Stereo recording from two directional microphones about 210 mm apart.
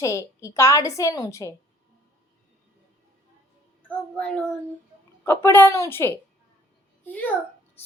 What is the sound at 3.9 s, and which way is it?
A child's voice, 5° left (ahead or behind).